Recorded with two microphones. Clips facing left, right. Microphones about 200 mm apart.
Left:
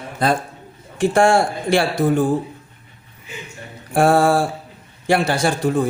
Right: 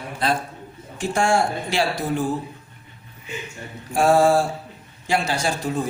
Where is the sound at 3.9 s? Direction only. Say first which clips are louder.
Left 2 dB; 55° left (ahead or behind).